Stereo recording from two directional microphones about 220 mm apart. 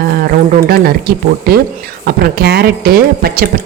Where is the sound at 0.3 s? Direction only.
45° right (ahead or behind).